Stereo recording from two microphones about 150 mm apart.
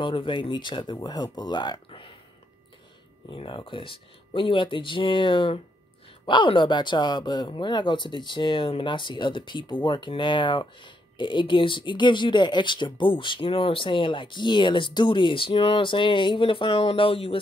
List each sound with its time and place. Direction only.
0.0 s speech: 35° left (ahead or behind)
3.3 s speech: 35° left (ahead or behind)